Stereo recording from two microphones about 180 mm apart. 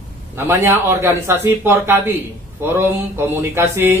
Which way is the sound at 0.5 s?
15° right (ahead or behind).